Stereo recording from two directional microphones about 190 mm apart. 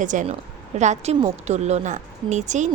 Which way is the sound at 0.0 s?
40° right (ahead or behind).